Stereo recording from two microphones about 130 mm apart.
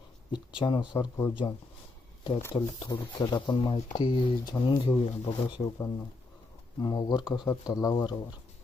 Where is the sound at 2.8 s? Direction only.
30° left (ahead or behind); by 4.0 s 50° left (ahead or behind).